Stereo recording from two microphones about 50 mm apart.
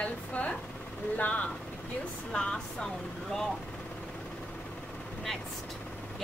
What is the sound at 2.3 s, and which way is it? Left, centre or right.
Speech, centre.